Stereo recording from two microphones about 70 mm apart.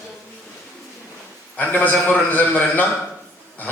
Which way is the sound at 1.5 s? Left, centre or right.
Left.